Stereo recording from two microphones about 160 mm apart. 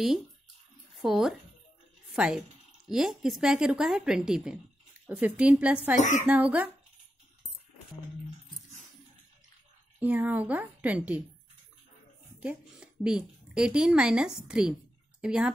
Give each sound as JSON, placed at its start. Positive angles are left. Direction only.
{"t": 0.9, "sound": "a woman's voice", "side_deg": 0}
{"t": 5.9, "sound": "speech", "side_deg": 50}
{"t": 6.2, "sound": "a woman's voice", "side_deg": -10}
{"t": 9.9, "sound": "a woman's voice", "side_deg": -10}
{"t": 12.4, "sound": "a woman's voice", "side_deg": -5}